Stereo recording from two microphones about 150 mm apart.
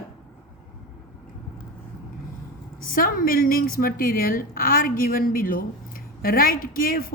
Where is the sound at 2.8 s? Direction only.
75° left (ahead or behind).